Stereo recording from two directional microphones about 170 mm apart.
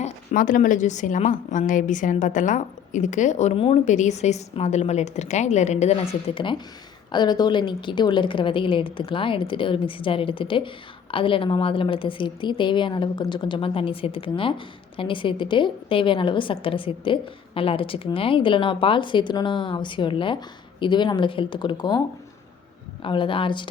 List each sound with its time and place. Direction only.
0.0 s a woman's voice: 45° left (ahead or behind); by 22.0 s 25° left (ahead or behind)
23.0 s a woman's voice: 30° left (ahead or behind)